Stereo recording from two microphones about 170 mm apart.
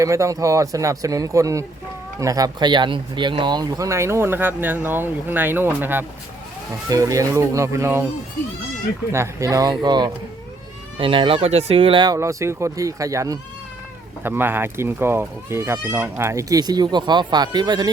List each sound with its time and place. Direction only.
0.0 s speech: 20° right (ahead or behind)
9.1 s speech: 15° right (ahead or behind)